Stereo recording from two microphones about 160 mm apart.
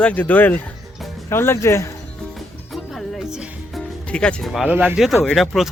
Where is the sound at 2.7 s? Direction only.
Centre (ahead or behind).